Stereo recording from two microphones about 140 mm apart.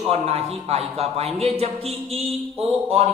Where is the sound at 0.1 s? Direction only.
45° right (ahead or behind).